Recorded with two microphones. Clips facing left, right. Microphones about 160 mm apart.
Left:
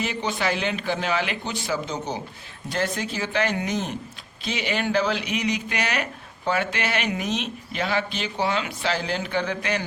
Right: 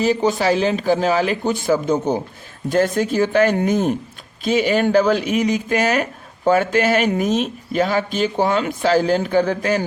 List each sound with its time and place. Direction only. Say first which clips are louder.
0.0 s speech: right 9 dB; 40° right (ahead or behind)